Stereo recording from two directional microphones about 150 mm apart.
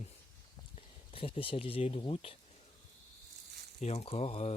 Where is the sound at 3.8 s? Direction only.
45° left (ahead or behind).